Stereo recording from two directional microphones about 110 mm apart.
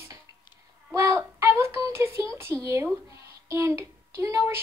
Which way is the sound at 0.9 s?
25° right (ahead or behind).